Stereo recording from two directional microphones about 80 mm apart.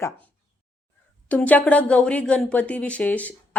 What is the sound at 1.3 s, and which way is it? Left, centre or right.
A woman's voice, left.